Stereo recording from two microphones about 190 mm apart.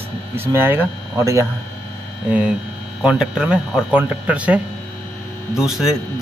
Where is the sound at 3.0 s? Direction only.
5° right (ahead or behind).